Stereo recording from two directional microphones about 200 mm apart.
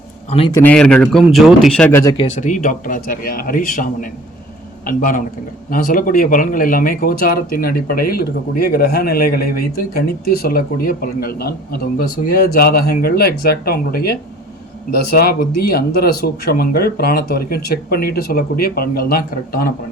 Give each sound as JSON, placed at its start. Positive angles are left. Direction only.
{"t": 0.3, "sound": "a man's voice", "side_deg": 30}
{"t": 0.5, "sound": "a man's voice", "side_deg": 5}
{"t": 2.1, "sound": "speech", "side_deg": 35}